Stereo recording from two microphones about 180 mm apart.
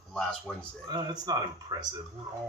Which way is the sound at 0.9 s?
25° right (ahead or behind).